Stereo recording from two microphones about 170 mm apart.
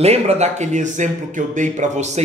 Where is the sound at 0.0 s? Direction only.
40° right (ahead or behind).